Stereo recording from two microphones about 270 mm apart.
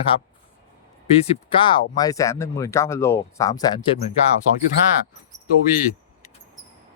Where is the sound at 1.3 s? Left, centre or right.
Centre.